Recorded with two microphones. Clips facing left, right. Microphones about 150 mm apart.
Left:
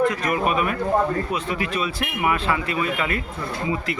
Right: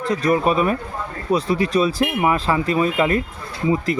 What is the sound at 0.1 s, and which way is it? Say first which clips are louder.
Speech: right 5 dB; 35° right (ahead or behind).